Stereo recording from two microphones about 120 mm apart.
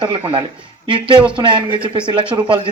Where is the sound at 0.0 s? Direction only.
45° right (ahead or behind).